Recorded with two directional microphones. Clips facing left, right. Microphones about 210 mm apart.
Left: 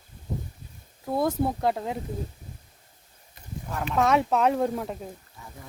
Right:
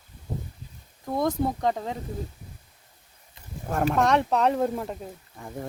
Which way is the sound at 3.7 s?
50° right (ahead or behind).